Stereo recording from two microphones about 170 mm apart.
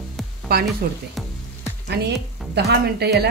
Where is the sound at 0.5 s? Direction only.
65° right (ahead or behind).